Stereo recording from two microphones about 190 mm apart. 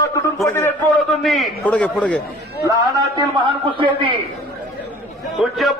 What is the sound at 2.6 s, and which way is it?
A man's voice, 20° right (ahead or behind).